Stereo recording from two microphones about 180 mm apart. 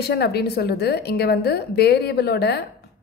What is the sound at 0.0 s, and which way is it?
A woman's voice, 60° left (ahead or behind).